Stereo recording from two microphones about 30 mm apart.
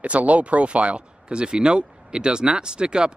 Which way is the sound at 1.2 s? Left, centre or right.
Right.